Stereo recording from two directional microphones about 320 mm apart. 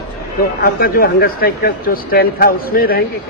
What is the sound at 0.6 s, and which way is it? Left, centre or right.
Speech, left.